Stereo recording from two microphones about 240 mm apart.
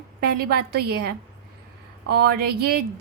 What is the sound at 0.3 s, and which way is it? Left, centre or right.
A woman's voice, right.